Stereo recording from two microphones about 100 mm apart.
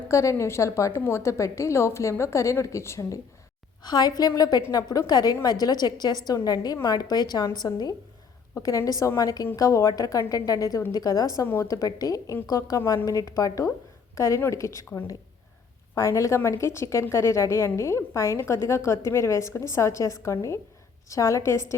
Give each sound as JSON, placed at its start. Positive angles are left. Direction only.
{"t": 0.1, "sound": "a woman's voice", "side_deg": 30}
{"t": 3.8, "sound": "a woman's voice", "side_deg": 40}
{"t": 8.5, "sound": "a woman's voice", "side_deg": 30}
{"t": 16.0, "sound": "a woman's voice", "side_deg": 30}